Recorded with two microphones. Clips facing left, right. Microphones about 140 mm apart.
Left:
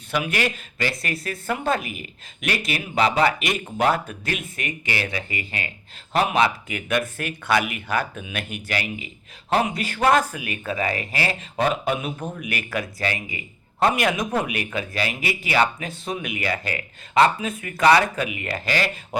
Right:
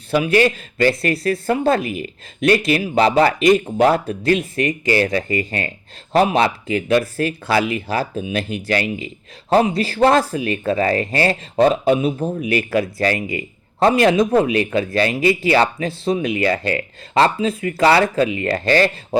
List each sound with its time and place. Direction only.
0.1 s speech: 30° right (ahead or behind)